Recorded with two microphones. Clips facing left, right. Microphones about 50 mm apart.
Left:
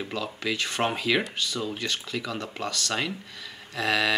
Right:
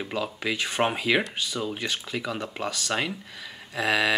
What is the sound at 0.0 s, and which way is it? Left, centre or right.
Speech, centre.